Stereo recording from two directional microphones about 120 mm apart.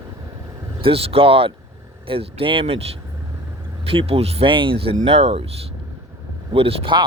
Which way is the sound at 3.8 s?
50° right (ahead or behind).